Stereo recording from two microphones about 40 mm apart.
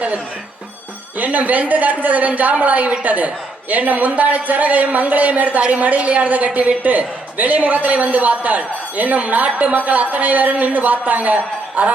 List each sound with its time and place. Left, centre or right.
1.2 s a man's voice: right